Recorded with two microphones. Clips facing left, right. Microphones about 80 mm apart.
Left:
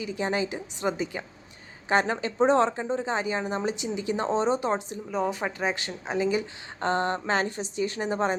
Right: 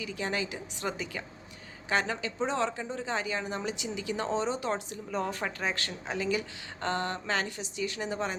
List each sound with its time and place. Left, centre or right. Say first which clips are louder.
0.0 s speech: left 5 dB; left
5.1 s speech: left 4 dB; centre; by 8.4 s left